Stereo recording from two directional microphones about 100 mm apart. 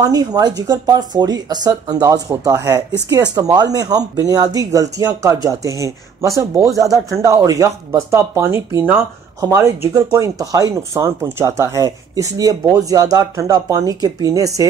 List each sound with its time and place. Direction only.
0.0 s speech: 40° right (ahead or behind)